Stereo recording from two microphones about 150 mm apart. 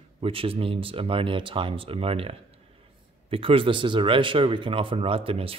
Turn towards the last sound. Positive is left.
turn(degrees=-40)  # may be behind; listen again after turning